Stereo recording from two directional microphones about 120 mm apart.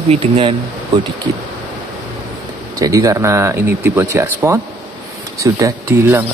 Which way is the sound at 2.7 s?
30° right (ahead or behind).